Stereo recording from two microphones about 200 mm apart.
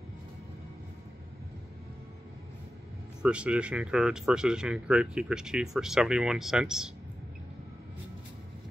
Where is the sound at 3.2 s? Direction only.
5° right (ahead or behind).